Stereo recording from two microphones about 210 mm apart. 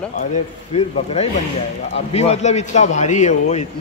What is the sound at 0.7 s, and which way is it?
A man's voice, 30° left (ahead or behind).